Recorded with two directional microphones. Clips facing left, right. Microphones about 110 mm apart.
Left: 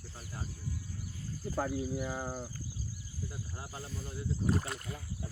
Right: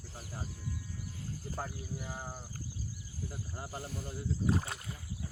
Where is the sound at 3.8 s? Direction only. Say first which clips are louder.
Right 1 dB; 65° right (ahead or behind).